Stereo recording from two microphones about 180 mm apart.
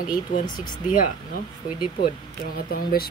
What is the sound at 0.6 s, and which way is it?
Speech, 45° left (ahead or behind).